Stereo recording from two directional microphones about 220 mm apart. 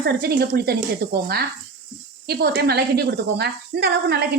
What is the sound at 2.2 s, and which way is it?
A woman's voice, 45° right (ahead or behind).